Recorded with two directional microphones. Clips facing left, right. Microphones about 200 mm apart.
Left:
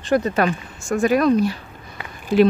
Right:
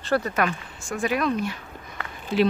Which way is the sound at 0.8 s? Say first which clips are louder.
Left 8 dB; 45° left (ahead or behind).